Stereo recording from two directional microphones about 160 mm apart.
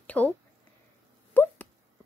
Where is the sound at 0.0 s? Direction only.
10° left (ahead or behind).